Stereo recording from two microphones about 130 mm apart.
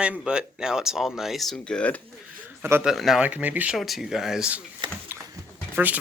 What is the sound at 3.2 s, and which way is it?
Speech, 10° right (ahead or behind).